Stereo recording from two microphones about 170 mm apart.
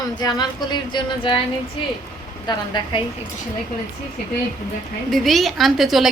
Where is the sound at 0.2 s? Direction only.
25° left (ahead or behind).